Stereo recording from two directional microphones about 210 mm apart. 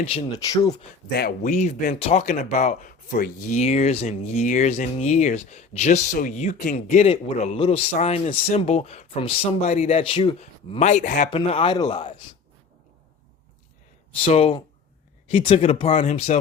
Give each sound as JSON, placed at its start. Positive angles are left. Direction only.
{"t": 0.0, "sound": "speech", "side_deg": 25}
{"t": 0.3, "sound": "speech", "side_deg": 15}
{"t": 1.4, "sound": "speech", "side_deg": 35}
{"t": 14.3, "sound": "speech", "side_deg": 30}